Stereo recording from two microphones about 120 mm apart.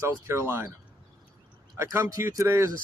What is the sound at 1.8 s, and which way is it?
Speech, 25° right (ahead or behind).